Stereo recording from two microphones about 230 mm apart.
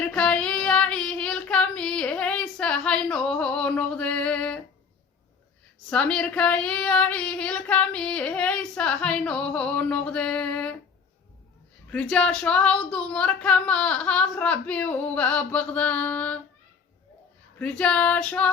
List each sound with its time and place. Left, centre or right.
0.0 s female singing: centre
5.9 s child singing: centre
11.9 s child singing: centre
17.6 s child singing: centre